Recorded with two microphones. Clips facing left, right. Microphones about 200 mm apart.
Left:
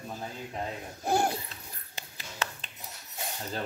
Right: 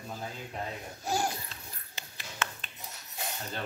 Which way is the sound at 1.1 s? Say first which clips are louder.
Left 5 dB; 55° left (ahead or behind).